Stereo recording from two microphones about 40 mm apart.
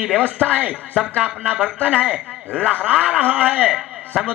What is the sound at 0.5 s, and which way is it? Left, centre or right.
A man's voice, right.